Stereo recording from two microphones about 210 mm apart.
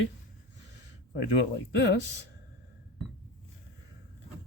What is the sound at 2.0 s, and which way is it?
Speech, 55° left (ahead or behind).